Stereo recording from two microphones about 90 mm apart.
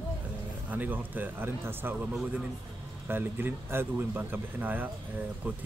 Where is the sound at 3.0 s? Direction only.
25° right (ahead or behind).